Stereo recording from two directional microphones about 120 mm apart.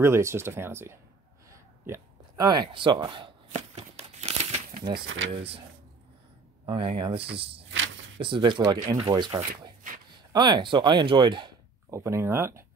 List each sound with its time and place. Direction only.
0.0 s speech: 20° right (ahead or behind)
1.5 s hiccup: 30° right (ahead or behind)
3.5 s a sound: 65° right (ahead or behind)
4.8 s speech: 50° right (ahead or behind)
6.7 s speech: 45° right (ahead or behind)
11.9 s speech: 25° right (ahead or behind)